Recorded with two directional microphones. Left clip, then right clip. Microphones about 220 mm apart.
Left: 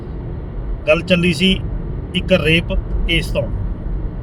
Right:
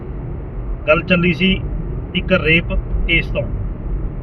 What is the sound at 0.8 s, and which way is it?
Speech, 15° left (ahead or behind).